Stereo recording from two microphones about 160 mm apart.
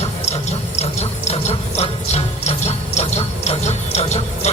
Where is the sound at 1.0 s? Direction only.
40° left (ahead or behind).